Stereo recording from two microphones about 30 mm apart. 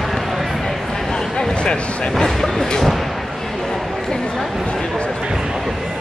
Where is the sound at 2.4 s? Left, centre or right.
Centre.